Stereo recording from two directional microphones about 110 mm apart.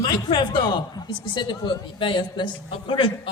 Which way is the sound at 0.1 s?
45° left (ahead or behind).